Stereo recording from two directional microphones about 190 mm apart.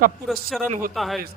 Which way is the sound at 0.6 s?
50° right (ahead or behind).